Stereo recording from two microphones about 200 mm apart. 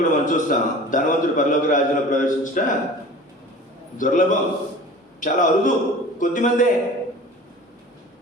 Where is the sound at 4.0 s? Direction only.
40° left (ahead or behind).